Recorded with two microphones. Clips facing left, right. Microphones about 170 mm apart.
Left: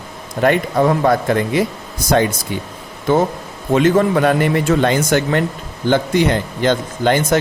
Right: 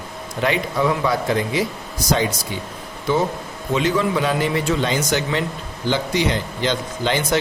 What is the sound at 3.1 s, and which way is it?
Speech, 55° left (ahead or behind).